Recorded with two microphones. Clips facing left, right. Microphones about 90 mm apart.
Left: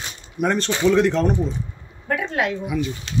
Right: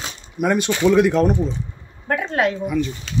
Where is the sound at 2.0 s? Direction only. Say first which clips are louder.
Right 3 dB; 40° right (ahead or behind).